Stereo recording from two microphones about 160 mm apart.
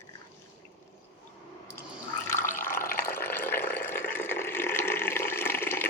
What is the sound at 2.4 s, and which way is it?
Water, 55° left (ahead or behind).